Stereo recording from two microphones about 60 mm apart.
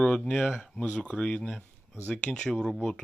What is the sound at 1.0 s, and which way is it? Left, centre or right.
Speech, centre.